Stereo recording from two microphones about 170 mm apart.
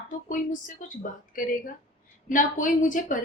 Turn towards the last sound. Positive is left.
turn(degrees=50)  # may be behind; listen again after turning